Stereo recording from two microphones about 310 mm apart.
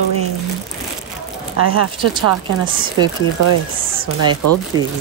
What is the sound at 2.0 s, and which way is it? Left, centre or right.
Speech, centre.